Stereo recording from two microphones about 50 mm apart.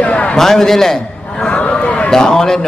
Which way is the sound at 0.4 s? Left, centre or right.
Centre.